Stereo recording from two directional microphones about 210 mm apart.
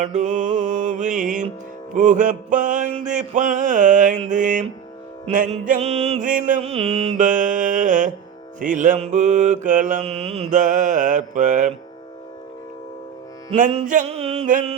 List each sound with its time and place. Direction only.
0.1 s mantra: 35° right (ahead or behind)
13.5 s music: 35° right (ahead or behind)